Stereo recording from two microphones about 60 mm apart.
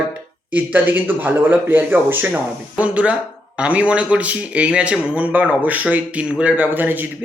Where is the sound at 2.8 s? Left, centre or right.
Right.